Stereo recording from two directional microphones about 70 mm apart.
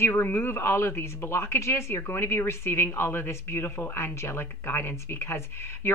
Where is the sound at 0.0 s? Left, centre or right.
Left.